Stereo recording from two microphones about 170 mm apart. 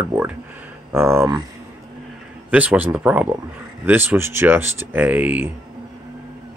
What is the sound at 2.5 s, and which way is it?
Speech, 10° right (ahead or behind).